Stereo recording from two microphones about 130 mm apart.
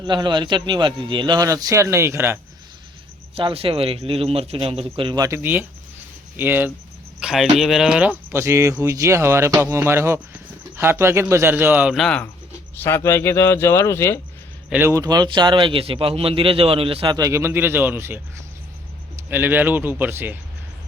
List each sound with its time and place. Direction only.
0.0 s a man's voice: 35° right (ahead or behind); by 2.4 s 20° right (ahead or behind)
3.3 s a man's voice: 45° right (ahead or behind)
5.2 s a man's voice: 20° right (ahead or behind)
7.2 s a man's voice: 5° right (ahead or behind)
11.9 s speech: 5° left (ahead or behind)
12.8 s speech: 20° left (ahead or behind)
14.7 s a man's voice: 20° right (ahead or behind); by 17.2 s 45° right (ahead or behind)
17.2 s a man's voice: 25° right (ahead or behind)